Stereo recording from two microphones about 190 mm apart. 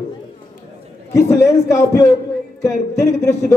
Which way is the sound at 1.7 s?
15° left (ahead or behind).